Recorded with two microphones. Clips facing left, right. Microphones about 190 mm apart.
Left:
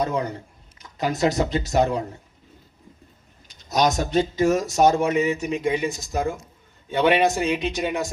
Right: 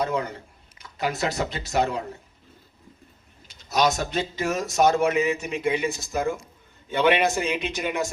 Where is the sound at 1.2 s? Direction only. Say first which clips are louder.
Left 9 dB; 15° left (ahead or behind).